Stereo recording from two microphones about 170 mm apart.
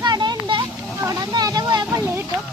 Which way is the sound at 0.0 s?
25° right (ahead or behind).